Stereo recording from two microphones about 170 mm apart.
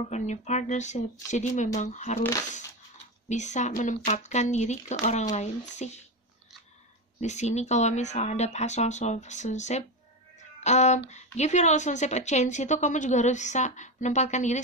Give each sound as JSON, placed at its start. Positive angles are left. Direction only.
{"t": 0.1, "sound": "a woman's voice", "side_deg": 45}
{"t": 3.3, "sound": "a woman's voice", "side_deg": 45}
{"t": 7.2, "sound": "a woman's voice", "side_deg": 40}